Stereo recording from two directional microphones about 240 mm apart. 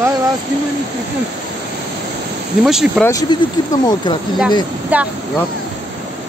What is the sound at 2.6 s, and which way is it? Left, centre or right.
Speech, centre.